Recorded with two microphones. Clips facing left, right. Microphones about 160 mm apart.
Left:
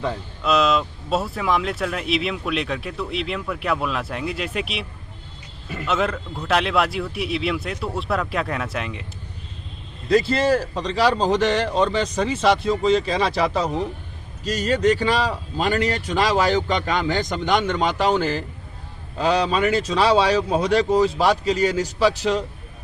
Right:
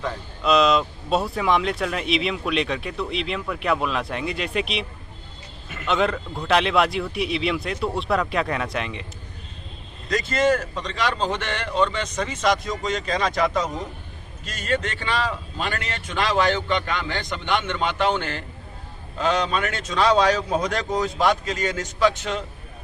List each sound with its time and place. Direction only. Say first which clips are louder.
0.4 s speech: right 1 dB; centre (ahead or behind)
10.1 s speech: left 3 dB; 30° left (ahead or behind)
21.8 s speech: left 2 dB; 35° left (ahead or behind)